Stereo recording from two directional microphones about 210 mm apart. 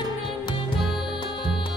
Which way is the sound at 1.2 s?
25° left (ahead or behind).